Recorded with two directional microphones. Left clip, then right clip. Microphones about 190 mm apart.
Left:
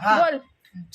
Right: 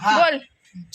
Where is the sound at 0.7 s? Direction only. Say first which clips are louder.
Even; 45° left (ahead or behind).